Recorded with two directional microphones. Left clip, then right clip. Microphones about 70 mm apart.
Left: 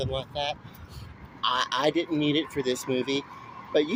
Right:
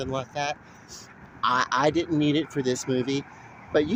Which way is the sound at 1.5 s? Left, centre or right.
Right.